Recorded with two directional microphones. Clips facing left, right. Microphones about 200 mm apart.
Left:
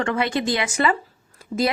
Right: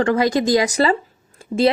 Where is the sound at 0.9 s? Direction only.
30° right (ahead or behind).